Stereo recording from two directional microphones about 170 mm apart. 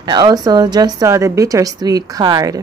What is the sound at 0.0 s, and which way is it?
Speech, 25° right (ahead or behind).